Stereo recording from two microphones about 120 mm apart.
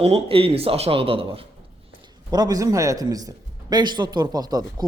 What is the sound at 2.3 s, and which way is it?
A man's voice, 35° right (ahead or behind).